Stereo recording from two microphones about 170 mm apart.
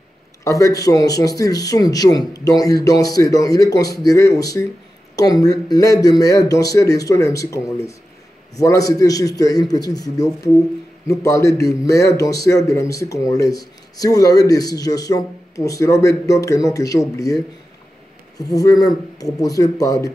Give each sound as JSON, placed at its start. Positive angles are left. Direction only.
{"t": 0.4, "sound": "speech", "side_deg": 20}
{"t": 18.4, "sound": "speech", "side_deg": 20}